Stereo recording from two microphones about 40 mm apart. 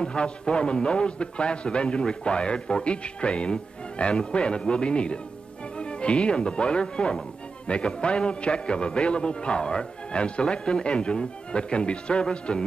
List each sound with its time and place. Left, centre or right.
0.0 s a man's voice: left